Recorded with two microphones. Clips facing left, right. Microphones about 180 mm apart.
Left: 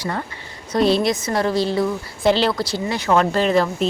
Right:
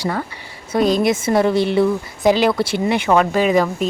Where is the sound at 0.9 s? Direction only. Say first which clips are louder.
Right 2 dB; 45° right (ahead or behind).